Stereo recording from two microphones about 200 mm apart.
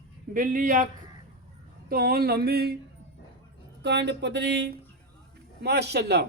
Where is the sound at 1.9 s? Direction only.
50° right (ahead or behind).